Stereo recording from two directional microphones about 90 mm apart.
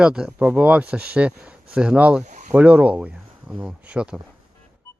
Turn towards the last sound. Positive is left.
turn(degrees=-10)  # may be behind; listen again after turning